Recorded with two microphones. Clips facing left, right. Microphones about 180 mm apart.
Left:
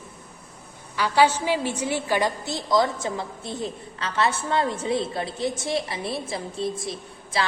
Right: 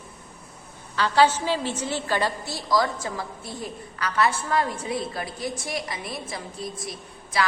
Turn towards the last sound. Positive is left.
turn(degrees=25)  # may be behind; listen again after turning